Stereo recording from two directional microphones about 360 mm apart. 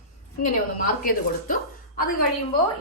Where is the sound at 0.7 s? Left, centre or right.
Left.